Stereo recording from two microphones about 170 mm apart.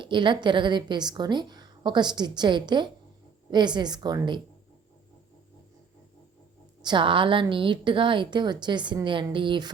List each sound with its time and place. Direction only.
0.0 s a woman's voice: 30° right (ahead or behind)
6.8 s a woman's voice: 30° right (ahead or behind)